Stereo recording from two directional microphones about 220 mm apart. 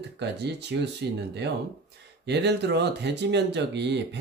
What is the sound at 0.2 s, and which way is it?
Speech, 50° right (ahead or behind).